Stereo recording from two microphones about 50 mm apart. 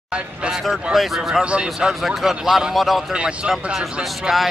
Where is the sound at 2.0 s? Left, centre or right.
Centre.